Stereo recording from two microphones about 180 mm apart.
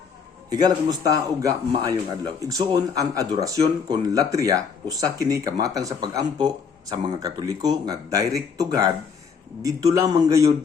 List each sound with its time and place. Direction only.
0.5 s speech: 20° right (ahead or behind)